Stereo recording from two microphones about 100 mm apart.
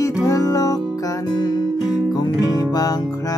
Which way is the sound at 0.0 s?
35° left (ahead or behind).